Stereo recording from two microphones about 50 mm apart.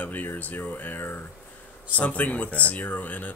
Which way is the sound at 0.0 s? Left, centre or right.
Left.